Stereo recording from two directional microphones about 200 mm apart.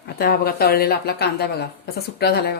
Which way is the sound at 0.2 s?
50° left (ahead or behind).